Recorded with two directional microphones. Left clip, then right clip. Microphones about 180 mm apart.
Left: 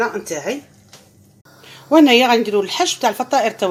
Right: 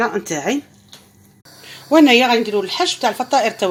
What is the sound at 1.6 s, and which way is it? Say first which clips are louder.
A woman's voice: even; centre (ahead or behind).